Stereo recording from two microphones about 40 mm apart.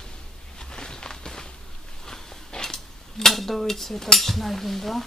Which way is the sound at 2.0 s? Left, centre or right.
Centre.